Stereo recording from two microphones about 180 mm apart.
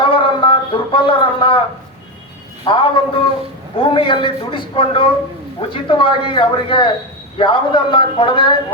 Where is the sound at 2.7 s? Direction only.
25° left (ahead or behind).